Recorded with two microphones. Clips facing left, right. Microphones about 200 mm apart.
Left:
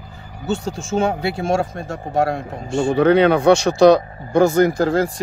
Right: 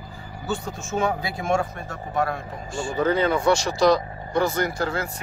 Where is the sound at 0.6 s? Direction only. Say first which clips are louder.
Left 7 dB; 90° left.